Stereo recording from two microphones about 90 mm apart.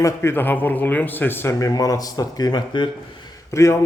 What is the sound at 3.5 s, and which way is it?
Speech, 35° left (ahead or behind).